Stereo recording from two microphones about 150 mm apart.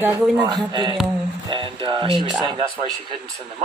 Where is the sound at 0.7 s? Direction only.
30° right (ahead or behind).